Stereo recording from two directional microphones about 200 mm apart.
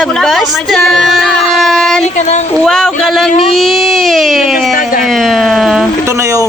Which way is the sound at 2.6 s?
5° left (ahead or behind).